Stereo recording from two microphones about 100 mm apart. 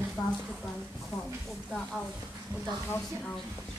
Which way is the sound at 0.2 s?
30° left (ahead or behind).